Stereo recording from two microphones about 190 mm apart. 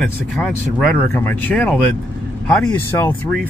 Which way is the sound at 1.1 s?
10° left (ahead or behind).